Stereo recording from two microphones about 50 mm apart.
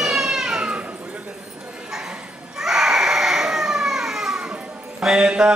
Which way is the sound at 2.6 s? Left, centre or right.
Centre.